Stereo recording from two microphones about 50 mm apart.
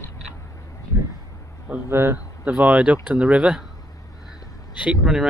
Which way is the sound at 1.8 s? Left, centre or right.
Right.